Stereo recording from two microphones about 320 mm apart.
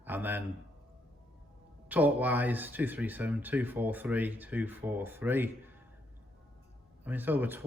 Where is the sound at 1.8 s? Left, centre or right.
Centre.